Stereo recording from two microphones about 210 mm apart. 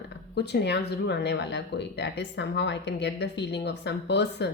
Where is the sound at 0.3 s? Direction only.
55° left (ahead or behind).